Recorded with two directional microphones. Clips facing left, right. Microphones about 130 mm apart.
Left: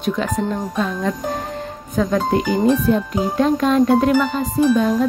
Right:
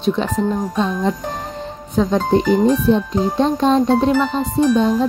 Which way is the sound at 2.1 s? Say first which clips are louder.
Right 3 dB; 5° left (ahead or behind).